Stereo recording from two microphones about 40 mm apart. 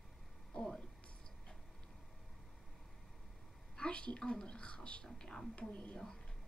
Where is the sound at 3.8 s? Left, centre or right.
Left.